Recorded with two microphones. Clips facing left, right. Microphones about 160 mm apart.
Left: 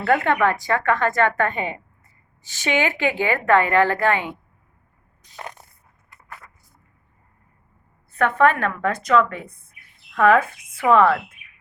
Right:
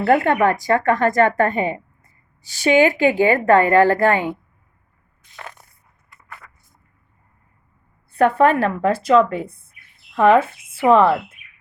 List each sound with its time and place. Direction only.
0.0 s a woman's voice: 40° right (ahead or behind)
8.1 s a woman's voice: 35° right (ahead or behind)